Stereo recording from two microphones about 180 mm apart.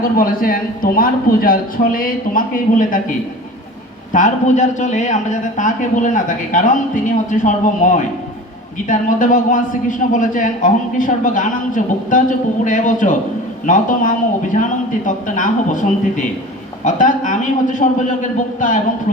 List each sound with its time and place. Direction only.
0.0 s a man's voice: 50° left (ahead or behind)
4.1 s a man's voice: 45° left (ahead or behind)